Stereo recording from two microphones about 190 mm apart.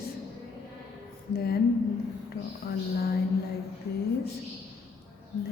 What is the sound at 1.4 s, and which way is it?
A woman's voice, 55° left (ahead or behind).